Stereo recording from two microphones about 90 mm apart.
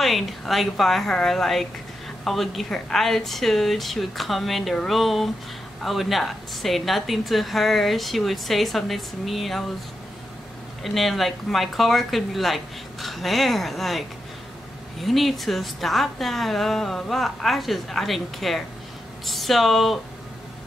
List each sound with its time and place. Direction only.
0.0 s a woman's voice: centre (ahead or behind)
10.8 s a woman's voice: centre (ahead or behind)